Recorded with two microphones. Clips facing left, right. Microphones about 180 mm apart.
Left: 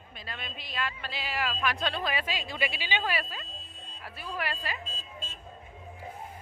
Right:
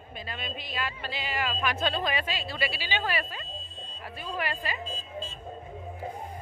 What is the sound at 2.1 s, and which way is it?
A woman's voice, 10° left (ahead or behind).